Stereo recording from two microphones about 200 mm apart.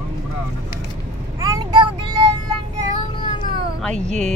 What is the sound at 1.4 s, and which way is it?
Vehicle, 20° right (ahead or behind).